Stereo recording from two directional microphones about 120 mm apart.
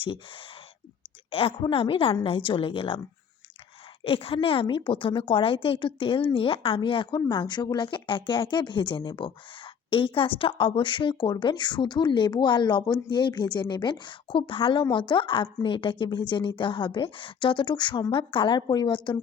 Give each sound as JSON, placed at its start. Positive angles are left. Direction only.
{"t": 0.0, "sound": "a woman's voice", "side_deg": 45}
{"t": 4.0, "sound": "a woman's voice", "side_deg": 50}